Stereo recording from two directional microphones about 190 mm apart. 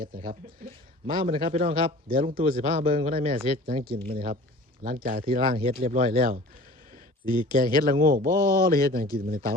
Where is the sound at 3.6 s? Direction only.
50° right (ahead or behind).